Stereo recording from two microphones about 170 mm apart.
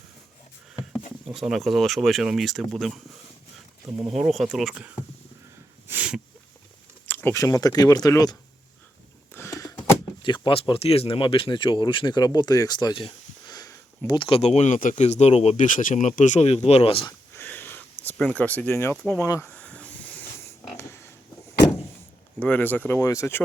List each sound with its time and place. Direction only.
1.2 s speech: centre (ahead or behind)
5.9 s dog: 10° right (ahead or behind)
7.1 s speech: 10° left (ahead or behind)
9.3 s a sound: 15° left (ahead or behind)
10.2 s speech: 30° left (ahead or behind)
17.1 s a sound: 15° left (ahead or behind)
19.3 s snake: 10° left (ahead or behind)
22.4 s speech: 10° left (ahead or behind)